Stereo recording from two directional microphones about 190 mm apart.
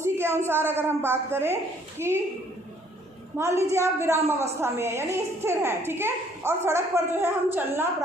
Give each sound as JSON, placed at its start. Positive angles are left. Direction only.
{"t": 0.0, "sound": "a woman's voice", "side_deg": -10}
{"t": 3.3, "sound": "a woman's voice", "side_deg": -15}